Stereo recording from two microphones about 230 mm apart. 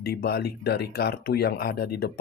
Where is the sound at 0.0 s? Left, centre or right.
Left.